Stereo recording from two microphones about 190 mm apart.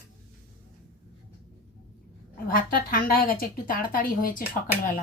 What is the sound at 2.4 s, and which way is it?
A woman's voice, 50° left (ahead or behind).